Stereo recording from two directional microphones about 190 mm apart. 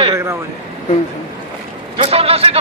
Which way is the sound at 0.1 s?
15° right (ahead or behind).